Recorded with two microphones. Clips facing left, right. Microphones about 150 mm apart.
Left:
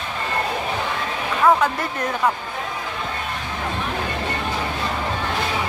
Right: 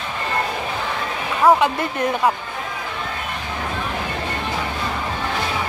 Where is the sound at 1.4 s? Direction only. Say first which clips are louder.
Right 2 dB; 20° right (ahead or behind).